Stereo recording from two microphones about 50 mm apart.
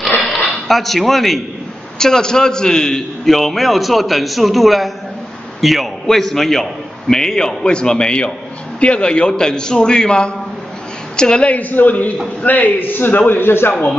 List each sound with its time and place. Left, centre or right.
0.2 s a sound: centre
2.0 s a man's voice: centre
11.4 s a man's voice: left